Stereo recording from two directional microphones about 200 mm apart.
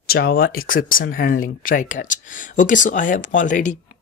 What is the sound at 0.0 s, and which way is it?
Speech, 50° left (ahead or behind).